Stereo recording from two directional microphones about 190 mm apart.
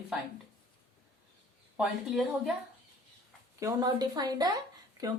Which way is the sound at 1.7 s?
5° right (ahead or behind).